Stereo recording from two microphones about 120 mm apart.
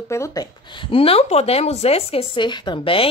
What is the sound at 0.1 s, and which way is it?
Speech, 30° left (ahead or behind).